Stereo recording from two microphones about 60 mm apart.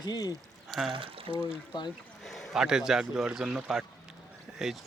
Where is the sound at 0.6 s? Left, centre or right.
Centre.